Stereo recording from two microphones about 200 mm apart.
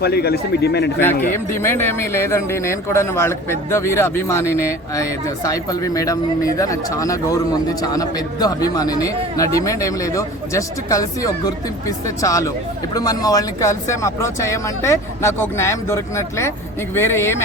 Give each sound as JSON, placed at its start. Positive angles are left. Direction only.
{"t": 0.0, "sound": "speech", "side_deg": 55}
{"t": 1.5, "sound": "speech", "side_deg": 10}